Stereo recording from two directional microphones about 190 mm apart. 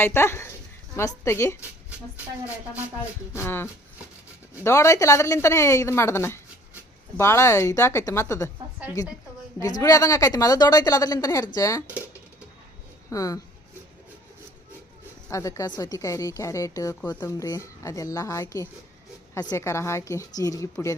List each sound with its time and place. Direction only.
0.0 s speech: 10° left (ahead or behind)
3.3 s a woman's voice: 10° left (ahead or behind)
13.1 s speech: 15° left (ahead or behind)
15.3 s speech: 15° left (ahead or behind)